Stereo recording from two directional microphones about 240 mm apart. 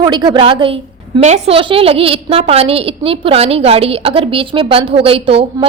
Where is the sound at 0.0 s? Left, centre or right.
Centre.